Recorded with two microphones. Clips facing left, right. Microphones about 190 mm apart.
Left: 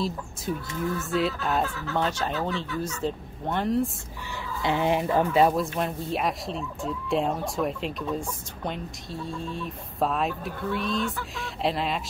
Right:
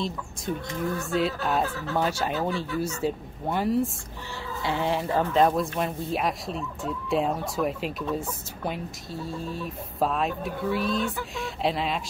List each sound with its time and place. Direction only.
0.0 s speech: centre (ahead or behind)
4.4 s speech: 15° left (ahead or behind); by 12.0 s centre (ahead or behind)